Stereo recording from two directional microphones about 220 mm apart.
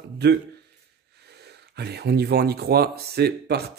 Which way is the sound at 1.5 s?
50° right (ahead or behind).